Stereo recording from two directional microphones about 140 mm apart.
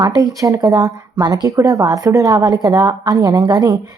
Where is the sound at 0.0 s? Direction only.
25° right (ahead or behind).